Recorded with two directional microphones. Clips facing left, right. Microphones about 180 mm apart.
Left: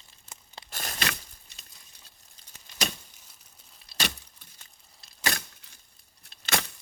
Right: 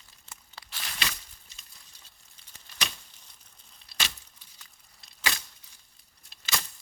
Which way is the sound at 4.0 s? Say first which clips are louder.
Left 5 dB; 55° left (ahead or behind).